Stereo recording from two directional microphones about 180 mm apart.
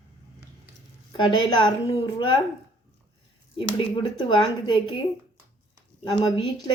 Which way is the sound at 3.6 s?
25° left (ahead or behind).